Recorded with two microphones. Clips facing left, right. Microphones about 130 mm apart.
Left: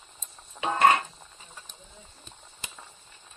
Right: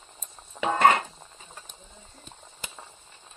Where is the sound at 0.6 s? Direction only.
15° right (ahead or behind).